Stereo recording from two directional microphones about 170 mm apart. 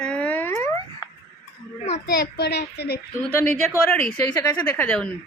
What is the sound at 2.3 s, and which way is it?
Speech, 75° left (ahead or behind).